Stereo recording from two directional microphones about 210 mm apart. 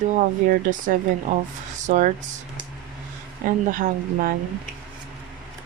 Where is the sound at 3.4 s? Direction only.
40° right (ahead or behind).